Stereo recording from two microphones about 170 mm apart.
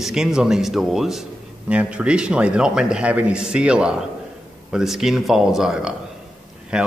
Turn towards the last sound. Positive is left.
turn(degrees=-5)  # may be behind; listen again after turning